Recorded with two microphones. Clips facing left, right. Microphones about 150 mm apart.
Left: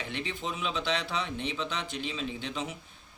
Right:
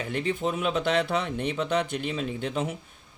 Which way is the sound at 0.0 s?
45° right (ahead or behind).